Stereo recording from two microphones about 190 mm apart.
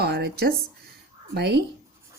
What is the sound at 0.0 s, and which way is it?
Speech, 55° right (ahead or behind).